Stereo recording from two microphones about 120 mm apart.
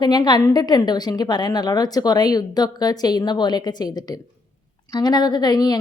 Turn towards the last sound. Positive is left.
turn(degrees=35)  # may be behind; listen again after turning